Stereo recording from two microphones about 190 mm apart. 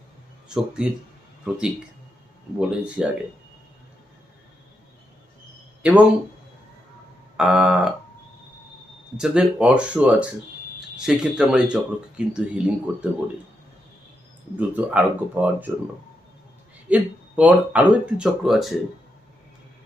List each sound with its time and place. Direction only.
0.4 s speech: 5° right (ahead or behind)
2.6 s speech: 5° right (ahead or behind)
5.8 s speech: 5° right (ahead or behind)
7.3 s speech: 5° right (ahead or behind)
9.1 s speech: 5° right (ahead or behind)
14.5 s speech: 5° right (ahead or behind)
16.9 s speech: 5° right (ahead or behind)